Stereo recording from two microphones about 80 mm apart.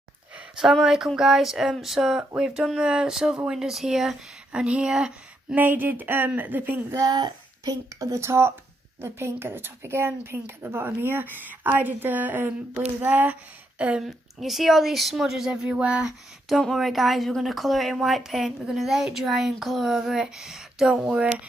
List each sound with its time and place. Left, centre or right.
0.6 s speech: centre
5.6 s a woman's voice: right
6.9 s speech: right
8.0 s a woman's voice: right; by 14.0 s centre
14.0 s speech: centre